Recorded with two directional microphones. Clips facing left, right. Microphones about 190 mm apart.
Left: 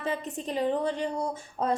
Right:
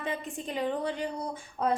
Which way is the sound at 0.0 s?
35° left (ahead or behind).